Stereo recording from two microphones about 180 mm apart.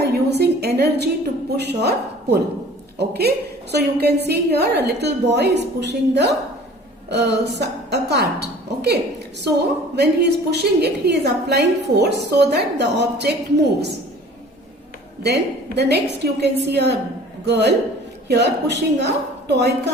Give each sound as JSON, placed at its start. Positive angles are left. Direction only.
{"t": 0.0, "sound": "a sound", "side_deg": -65}
{"t": 0.8, "sound": "a woman's voice", "side_deg": -65}
{"t": 15.2, "sound": "a woman's voice", "side_deg": -65}